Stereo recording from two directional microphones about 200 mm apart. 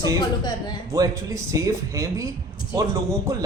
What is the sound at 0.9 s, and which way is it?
A man's voice, 15° right (ahead or behind).